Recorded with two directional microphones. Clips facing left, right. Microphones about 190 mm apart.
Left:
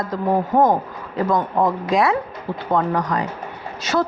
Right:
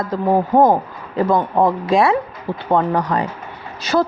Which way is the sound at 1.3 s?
30° right (ahead or behind).